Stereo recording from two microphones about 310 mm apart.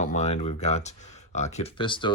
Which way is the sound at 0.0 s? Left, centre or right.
Left.